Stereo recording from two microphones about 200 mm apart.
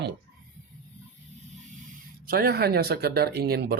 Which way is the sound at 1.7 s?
40° right (ahead or behind).